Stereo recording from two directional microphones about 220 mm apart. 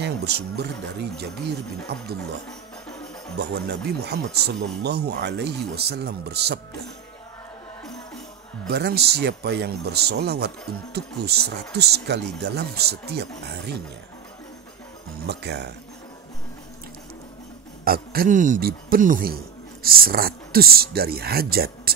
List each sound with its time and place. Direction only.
0.0 s speech: 50° right (ahead or behind)
1.9 s speech: 45° right (ahead or behind)
3.3 s speech: 50° right (ahead or behind)
8.6 s speech: 50° right (ahead or behind)
15.2 s speech: 50° right (ahead or behind)
17.8 s speech: 40° right (ahead or behind)